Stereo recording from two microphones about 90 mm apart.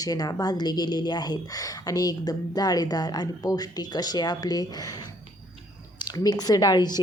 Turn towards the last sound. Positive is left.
turn(degrees=50)  # may be behind; listen again after turning